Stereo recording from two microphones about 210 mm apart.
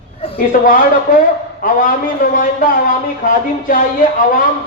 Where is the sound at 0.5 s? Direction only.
40° left (ahead or behind).